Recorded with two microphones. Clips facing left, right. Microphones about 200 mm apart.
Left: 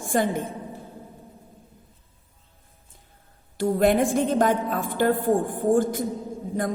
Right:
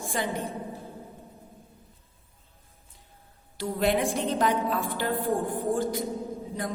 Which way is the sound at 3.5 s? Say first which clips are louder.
Left 6 dB; 50° left (ahead or behind).